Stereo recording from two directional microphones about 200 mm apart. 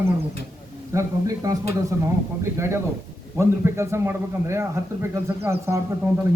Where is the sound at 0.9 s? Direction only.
15° right (ahead or behind).